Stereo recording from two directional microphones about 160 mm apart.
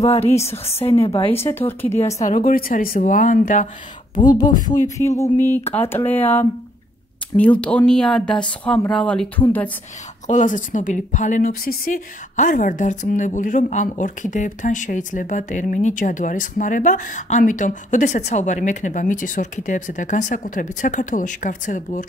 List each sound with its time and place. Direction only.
0.0 s a woman's voice: 40° left (ahead or behind)
1.3 s speech: 15° left (ahead or behind)
2.1 s speech: 55° left (ahead or behind)
4.1 s speech: 25° left (ahead or behind)
5.1 s speech: 15° left (ahead or behind)
7.6 s speech: 5° left (ahead or behind)
10.2 s a woman's voice: 50° left (ahead or behind)